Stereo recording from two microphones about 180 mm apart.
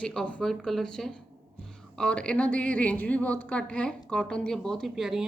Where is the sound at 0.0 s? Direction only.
5° left (ahead or behind).